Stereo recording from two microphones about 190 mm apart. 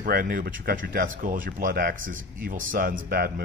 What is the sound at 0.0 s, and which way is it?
Speech, 50° right (ahead or behind).